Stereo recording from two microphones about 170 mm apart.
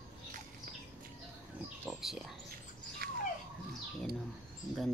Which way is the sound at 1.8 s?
Centre (ahead or behind).